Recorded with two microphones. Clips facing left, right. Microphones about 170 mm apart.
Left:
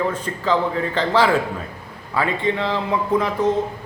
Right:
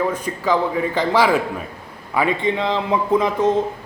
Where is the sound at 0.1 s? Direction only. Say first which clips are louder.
Right 1 dB; 10° right (ahead or behind).